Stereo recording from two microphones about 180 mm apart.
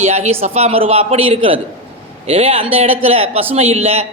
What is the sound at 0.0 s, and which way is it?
A man's voice, 35° right (ahead or behind).